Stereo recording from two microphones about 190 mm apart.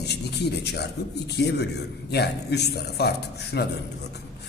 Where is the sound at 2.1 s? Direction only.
60° left (ahead or behind).